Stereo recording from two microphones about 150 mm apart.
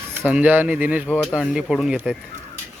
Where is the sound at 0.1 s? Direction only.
10° right (ahead or behind).